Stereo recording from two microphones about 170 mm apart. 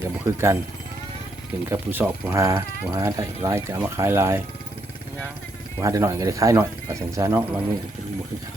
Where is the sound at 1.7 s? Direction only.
10° right (ahead or behind).